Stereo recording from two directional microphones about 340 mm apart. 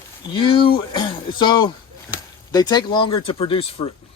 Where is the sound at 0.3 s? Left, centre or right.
Centre.